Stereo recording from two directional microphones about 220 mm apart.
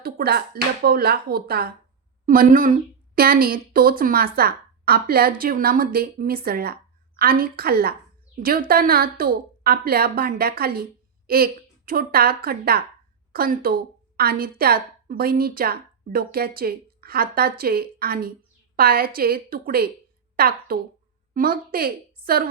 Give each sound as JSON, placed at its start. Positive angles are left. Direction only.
{"t": 0.0, "sound": "a woman's voice", "side_deg": -45}